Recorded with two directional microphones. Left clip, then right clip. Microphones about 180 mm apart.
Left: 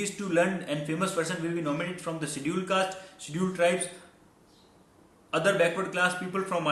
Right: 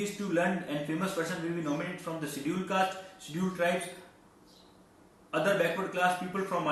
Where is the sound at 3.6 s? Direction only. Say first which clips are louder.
Left 4 dB; 50° left (ahead or behind).